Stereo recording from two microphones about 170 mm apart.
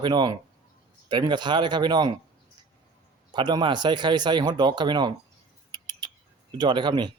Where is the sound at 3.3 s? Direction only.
25° right (ahead or behind).